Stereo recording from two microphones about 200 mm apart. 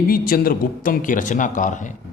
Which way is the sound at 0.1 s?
45° left (ahead or behind).